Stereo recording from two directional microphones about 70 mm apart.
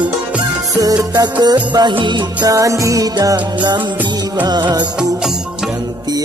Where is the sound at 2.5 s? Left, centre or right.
Right.